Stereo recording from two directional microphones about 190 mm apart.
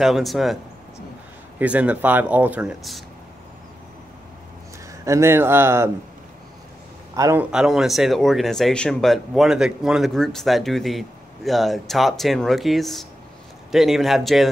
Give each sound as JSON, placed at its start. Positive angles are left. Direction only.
{"t": 0.0, "sound": "speech", "side_deg": 0}
{"t": 1.6, "sound": "speech", "side_deg": -5}
{"t": 5.0, "sound": "speech", "side_deg": -15}
{"t": 7.2, "sound": "speech", "side_deg": -15}
{"t": 7.5, "sound": "speech", "side_deg": -5}